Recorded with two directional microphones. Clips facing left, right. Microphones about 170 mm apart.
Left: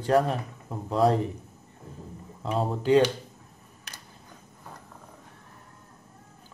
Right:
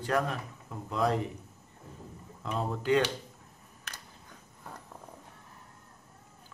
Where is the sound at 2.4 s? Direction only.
30° left (ahead or behind).